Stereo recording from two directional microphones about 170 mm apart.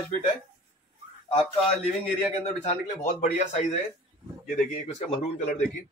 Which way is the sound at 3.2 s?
45° left (ahead or behind).